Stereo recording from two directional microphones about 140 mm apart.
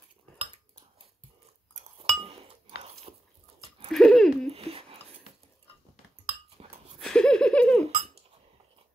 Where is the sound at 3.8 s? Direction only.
Centre (ahead or behind).